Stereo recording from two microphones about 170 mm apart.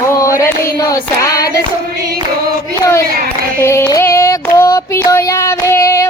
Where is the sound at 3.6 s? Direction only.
15° left (ahead or behind).